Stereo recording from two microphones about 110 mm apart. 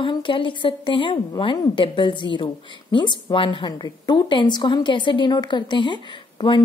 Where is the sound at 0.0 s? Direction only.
50° left (ahead or behind).